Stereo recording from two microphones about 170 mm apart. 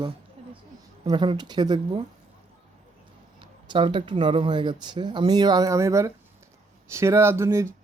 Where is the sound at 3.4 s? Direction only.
30° right (ahead or behind).